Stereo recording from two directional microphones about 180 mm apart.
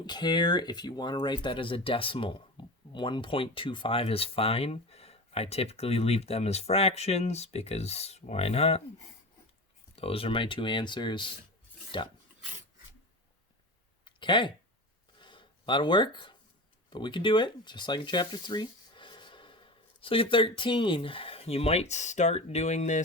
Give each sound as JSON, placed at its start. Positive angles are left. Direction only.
{"t": 0.0, "sound": "speech", "side_deg": 25}
{"t": 9.9, "sound": "speech", "side_deg": 30}
{"t": 14.0, "sound": "a sound", "side_deg": 25}
{"t": 16.9, "sound": "speech", "side_deg": 25}